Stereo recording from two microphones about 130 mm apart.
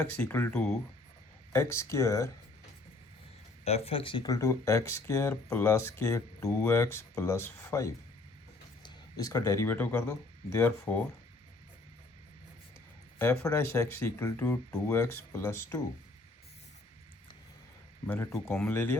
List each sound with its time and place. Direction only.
0.2 s speech: 15° left (ahead or behind)
3.6 s speech: 55° left (ahead or behind); by 11.0 s 20° left (ahead or behind)
13.1 s speech: 20° left (ahead or behind)
18.0 s speech: 15° left (ahead or behind)